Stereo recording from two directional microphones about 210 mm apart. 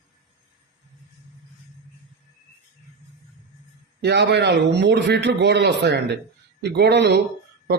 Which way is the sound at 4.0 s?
55° right (ahead or behind).